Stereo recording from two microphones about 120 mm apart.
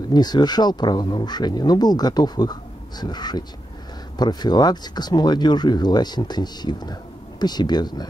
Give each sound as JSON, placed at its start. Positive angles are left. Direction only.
{"t": 0.1, "sound": "speech", "side_deg": 35}